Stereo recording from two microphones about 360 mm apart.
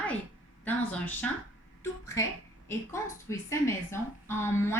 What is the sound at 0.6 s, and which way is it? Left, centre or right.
A woman's voice, centre.